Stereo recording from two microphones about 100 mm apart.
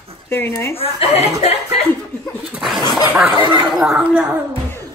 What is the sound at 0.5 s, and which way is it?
Speech, 30° left (ahead or behind).